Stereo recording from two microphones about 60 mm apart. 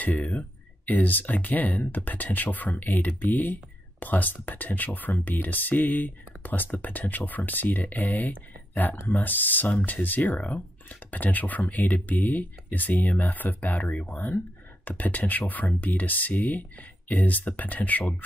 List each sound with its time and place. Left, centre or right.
0.0 s speech: left